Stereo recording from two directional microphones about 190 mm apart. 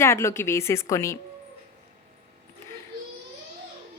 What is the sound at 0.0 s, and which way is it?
Speech, 15° left (ahead or behind).